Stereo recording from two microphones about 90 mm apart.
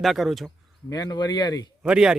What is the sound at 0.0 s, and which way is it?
Speech, centre (ahead or behind).